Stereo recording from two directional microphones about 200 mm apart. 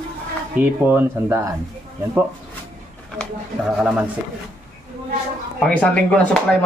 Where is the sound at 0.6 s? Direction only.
10° right (ahead or behind).